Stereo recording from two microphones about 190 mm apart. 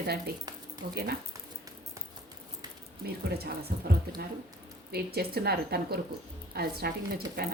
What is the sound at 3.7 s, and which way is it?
Speech, 55° right (ahead or behind).